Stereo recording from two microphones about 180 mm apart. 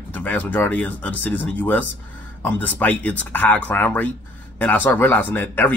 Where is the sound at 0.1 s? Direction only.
10° left (ahead or behind).